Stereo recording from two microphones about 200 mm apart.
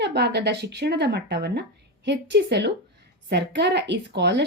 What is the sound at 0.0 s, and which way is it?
A woman's voice, 60° right (ahead or behind).